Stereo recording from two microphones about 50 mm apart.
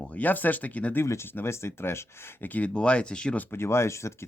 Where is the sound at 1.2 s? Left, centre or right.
Left.